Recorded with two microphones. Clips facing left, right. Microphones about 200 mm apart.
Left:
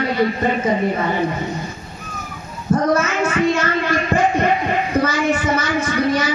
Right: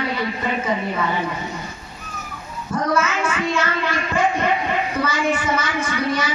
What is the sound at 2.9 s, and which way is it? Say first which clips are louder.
Speech: left 3 dB; 40° left (ahead or behind).